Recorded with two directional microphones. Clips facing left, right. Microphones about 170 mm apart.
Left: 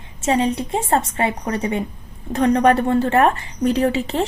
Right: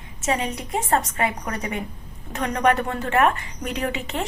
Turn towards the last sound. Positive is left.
turn(degrees=35)  # may be behind; listen again after turning